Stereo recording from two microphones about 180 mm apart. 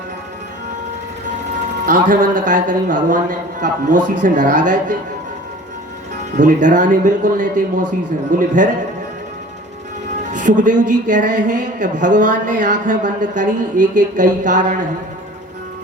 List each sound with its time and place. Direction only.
1.9 s speech: 45° right (ahead or behind)
6.3 s speech: 45° right (ahead or behind)
10.3 s speech: 45° right (ahead or behind)